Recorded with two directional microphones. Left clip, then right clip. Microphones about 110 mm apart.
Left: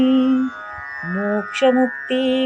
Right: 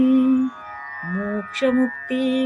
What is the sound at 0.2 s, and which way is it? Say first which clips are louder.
Music: left 1 dB; 35° left (ahead or behind).